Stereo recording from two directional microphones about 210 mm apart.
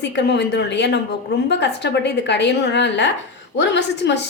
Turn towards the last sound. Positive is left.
turn(degrees=55)  # may be behind; listen again after turning